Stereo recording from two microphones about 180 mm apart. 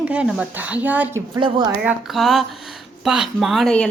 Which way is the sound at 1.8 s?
Centre (ahead or behind).